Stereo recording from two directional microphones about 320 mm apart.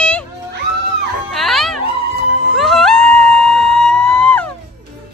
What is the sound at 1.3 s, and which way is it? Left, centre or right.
Music, centre.